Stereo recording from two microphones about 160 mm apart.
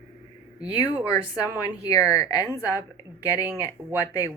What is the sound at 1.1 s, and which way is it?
Speech, 20° left (ahead or behind).